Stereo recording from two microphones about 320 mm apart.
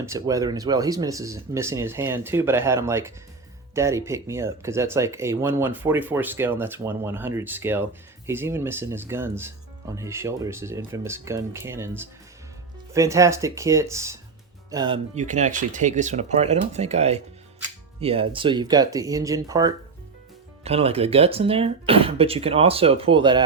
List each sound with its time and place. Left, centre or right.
0.0 s speech: centre